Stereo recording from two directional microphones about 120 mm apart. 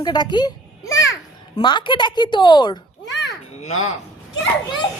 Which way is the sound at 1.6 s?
40° left (ahead or behind).